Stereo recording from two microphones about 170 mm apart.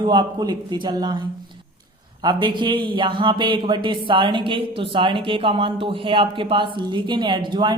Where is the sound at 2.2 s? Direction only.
25° right (ahead or behind).